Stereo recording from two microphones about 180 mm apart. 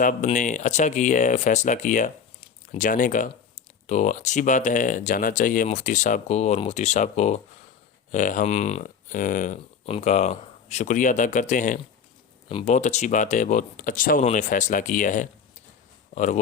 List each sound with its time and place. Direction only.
0.0 s speech: 45° left (ahead or behind)
12.5 s speech: 30° left (ahead or behind)
12.7 s speech: 40° left (ahead or behind)